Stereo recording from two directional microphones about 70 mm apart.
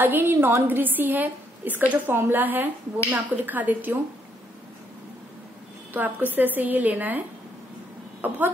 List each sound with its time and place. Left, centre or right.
0.0 s a woman's voice: right
5.9 s a woman's voice: right